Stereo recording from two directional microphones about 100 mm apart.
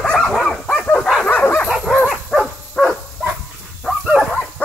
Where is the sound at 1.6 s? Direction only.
10° right (ahead or behind).